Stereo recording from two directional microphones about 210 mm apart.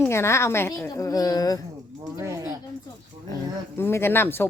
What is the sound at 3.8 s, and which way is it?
Speech, 10° left (ahead or behind).